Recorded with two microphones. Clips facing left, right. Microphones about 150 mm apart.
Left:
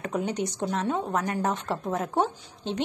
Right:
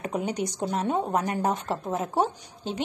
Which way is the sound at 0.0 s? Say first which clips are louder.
Even; 10° right (ahead or behind).